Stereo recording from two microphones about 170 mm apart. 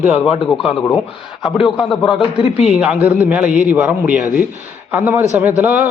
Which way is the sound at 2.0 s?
30° left (ahead or behind).